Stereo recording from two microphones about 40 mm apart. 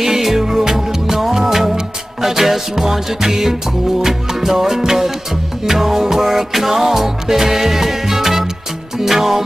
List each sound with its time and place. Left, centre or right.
0.0 s music: centre